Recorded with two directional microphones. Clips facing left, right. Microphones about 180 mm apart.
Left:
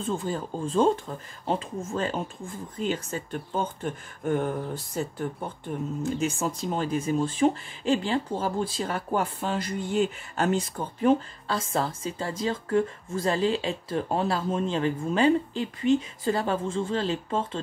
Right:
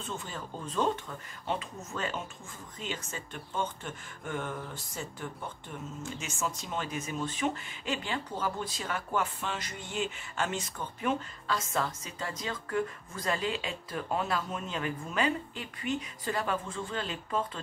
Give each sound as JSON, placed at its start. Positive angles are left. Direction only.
{"t": 0.0, "sound": "speech", "side_deg": 35}
{"t": 5.7, "sound": "speech", "side_deg": 50}
{"t": 6.0, "sound": "speech", "side_deg": 35}